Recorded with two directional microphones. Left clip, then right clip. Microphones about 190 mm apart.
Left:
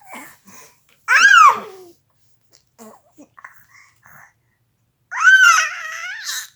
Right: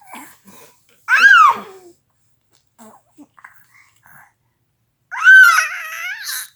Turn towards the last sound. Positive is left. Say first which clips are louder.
# right 1 dB
turn(degrees=15)  # may be behind; listen again after turning